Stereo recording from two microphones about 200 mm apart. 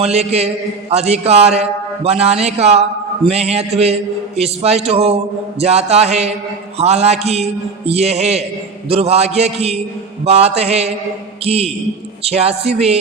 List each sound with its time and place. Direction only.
0.0 s a man's voice: 30° right (ahead or behind)